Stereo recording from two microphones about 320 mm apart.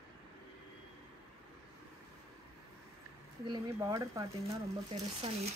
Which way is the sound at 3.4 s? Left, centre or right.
Centre.